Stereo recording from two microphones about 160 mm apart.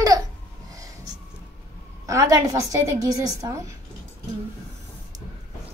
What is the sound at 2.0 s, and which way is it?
A woman's voice, 20° right (ahead or behind).